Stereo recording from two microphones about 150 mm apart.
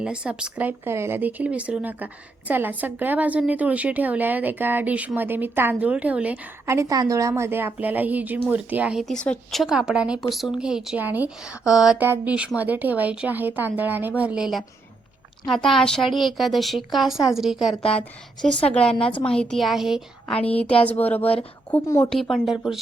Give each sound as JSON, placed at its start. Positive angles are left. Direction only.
{"t": 0.0, "sound": "a woman's voice", "side_deg": -5}
{"t": 22.1, "sound": "speech", "side_deg": 0}